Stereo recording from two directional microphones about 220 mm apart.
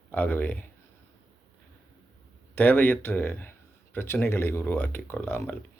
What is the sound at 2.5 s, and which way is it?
Speech, 10° left (ahead or behind).